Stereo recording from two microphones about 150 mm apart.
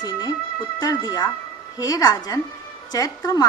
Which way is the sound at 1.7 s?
25° left (ahead or behind).